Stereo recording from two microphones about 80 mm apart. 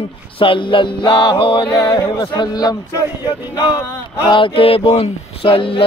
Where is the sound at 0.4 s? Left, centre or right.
Left.